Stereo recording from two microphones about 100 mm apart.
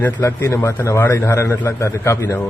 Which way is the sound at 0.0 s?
20° left (ahead or behind).